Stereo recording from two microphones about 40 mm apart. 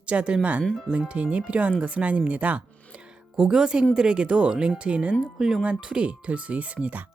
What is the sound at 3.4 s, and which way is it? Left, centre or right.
Speech, centre.